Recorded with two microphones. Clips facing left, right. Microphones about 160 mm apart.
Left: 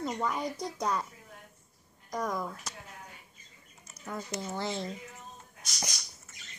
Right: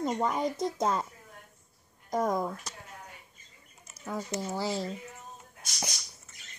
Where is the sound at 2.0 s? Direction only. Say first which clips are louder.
Right 5 dB; 25° right (ahead or behind).